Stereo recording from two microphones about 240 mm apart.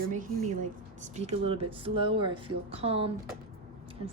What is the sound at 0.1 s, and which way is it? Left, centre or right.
A woman's voice, right.